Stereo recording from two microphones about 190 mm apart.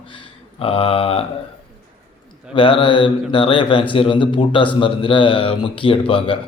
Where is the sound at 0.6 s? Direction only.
30° left (ahead or behind).